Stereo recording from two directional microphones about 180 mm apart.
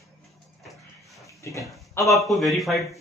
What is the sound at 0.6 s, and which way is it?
Music, centre (ahead or behind).